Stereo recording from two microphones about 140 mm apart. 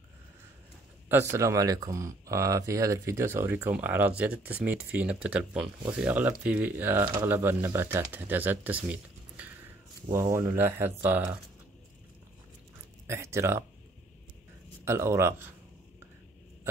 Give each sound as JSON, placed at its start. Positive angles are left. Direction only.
{"t": 1.0, "sound": "speech", "side_deg": -15}
{"t": 13.0, "sound": "speech", "side_deg": -20}
{"t": 14.9, "sound": "speech", "side_deg": -20}